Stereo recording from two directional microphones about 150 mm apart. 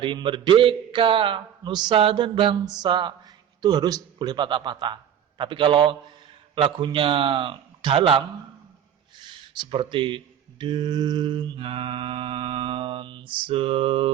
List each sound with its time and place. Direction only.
0.0 s a man's voice: 35° right (ahead or behind)